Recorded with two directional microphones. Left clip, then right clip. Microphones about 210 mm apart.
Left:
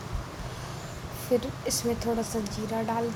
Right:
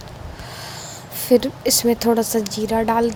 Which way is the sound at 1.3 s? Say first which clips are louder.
Right 11 dB; 45° right (ahead or behind).